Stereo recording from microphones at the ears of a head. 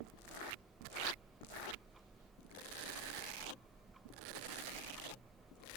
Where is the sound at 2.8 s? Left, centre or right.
Right.